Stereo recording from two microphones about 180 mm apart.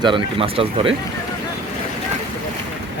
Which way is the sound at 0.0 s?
25° right (ahead or behind).